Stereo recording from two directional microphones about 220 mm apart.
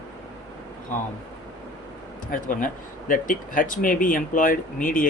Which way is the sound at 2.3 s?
40° left (ahead or behind).